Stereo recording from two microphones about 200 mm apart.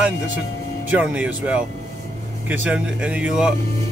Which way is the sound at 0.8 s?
5° right (ahead or behind).